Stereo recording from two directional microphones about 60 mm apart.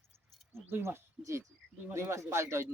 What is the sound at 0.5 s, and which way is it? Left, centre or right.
A man's voice, right.